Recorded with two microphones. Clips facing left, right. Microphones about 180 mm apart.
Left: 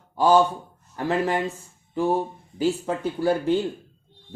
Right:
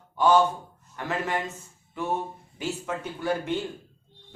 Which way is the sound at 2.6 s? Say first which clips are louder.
Left 8 dB; 30° left (ahead or behind).